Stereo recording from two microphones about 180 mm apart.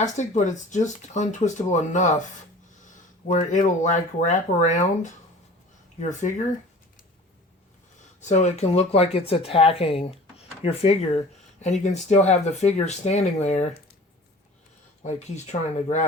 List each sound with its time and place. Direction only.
0.0 s speech: 40° left (ahead or behind)
6.0 s speech: 45° left (ahead or behind)
8.2 s speech: 40° left (ahead or behind)
15.7 s speech: 40° left (ahead or behind)